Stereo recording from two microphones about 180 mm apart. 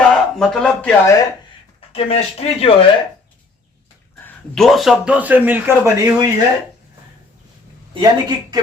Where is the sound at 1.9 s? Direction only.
35° left (ahead or behind).